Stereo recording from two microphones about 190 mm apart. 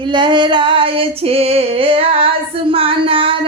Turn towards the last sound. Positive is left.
turn(degrees=-30)  # may be behind; listen again after turning